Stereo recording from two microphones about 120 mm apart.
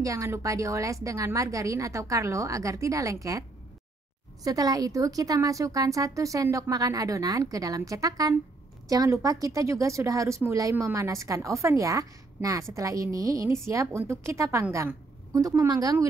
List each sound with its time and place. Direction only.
0.0 s a woman's voice: 25° right (ahead or behind)
4.5 s a woman's voice: 30° right (ahead or behind)